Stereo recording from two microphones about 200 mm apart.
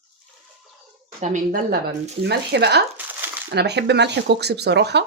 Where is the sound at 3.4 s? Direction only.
55° right (ahead or behind).